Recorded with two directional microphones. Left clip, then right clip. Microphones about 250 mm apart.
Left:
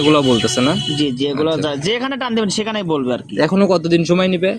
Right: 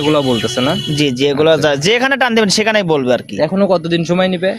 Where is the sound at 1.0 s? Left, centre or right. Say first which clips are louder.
Right 8 dB; right.